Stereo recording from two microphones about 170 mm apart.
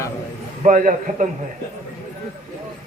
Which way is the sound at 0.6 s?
45° right (ahead or behind).